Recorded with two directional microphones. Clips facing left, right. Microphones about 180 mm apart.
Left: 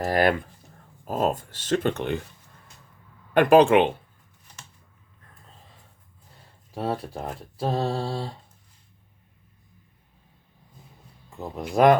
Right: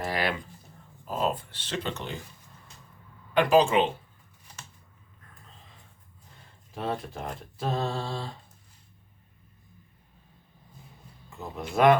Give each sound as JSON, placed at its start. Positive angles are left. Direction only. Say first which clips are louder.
{"t": 0.0, "sound": "a sound", "louder": "left 8 dB", "side_deg": 50}
{"t": 1.0, "sound": "speech", "louder": "left 4 dB", "side_deg": 50}
{"t": 3.3, "sound": "speech", "louder": "left 5 dB", "side_deg": 55}
{"t": 6.7, "sound": "speech", "louder": "left 3 dB", "side_deg": 35}
{"t": 11.7, "sound": "speech", "louder": "left 3 dB", "side_deg": 40}